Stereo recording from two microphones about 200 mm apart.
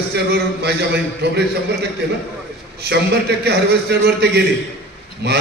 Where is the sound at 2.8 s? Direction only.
55° right (ahead or behind).